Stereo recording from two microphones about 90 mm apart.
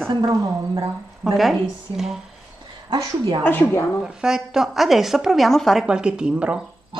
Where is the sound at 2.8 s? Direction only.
65° right (ahead or behind).